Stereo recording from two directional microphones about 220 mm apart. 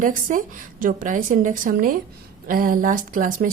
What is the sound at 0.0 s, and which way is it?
A woman's voice, 35° right (ahead or behind).